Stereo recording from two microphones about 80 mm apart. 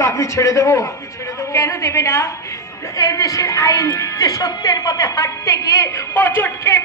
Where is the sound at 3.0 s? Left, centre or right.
Left.